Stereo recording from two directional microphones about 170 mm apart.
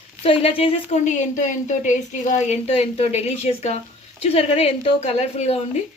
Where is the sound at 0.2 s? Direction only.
35° left (ahead or behind).